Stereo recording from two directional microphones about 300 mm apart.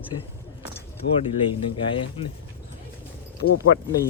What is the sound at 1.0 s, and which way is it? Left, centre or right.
Speech, left.